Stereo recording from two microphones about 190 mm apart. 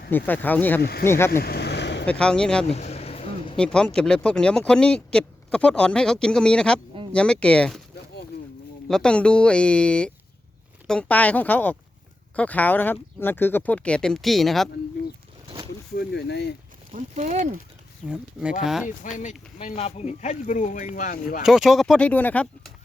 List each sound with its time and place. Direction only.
0.1 s speech: 10° left (ahead or behind)
0.8 s speech: 55° left (ahead or behind)
1.0 s speech: 15° left (ahead or behind)
1.3 s vehicle: 50° left (ahead or behind)
2.0 s speech: 5° left (ahead or behind)
2.6 s a sound: 35° left (ahead or behind)
3.6 s speech: 5° left (ahead or behind)
8.9 s speech: 5° left (ahead or behind)
16.0 s speech: 60° left (ahead or behind)
16.9 s speech: 40° right (ahead or behind)
18.1 s speech: 5° right (ahead or behind)
18.9 s speech: 40° left (ahead or behind)
21.4 s speech: centre (ahead or behind)